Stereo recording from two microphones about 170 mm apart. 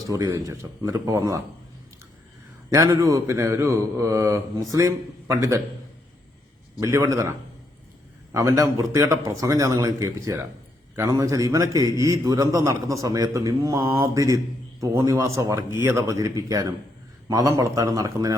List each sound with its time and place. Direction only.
0.0 s a man's voice: 20° right (ahead or behind)
2.6 s a man's voice: 20° right (ahead or behind)
6.7 s a man's voice: 15° right (ahead or behind)